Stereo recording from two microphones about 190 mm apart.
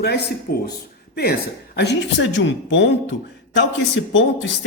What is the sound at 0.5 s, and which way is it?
A woman's voice, 50° left (ahead or behind).